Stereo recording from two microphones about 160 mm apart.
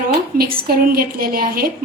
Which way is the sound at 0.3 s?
65° right (ahead or behind).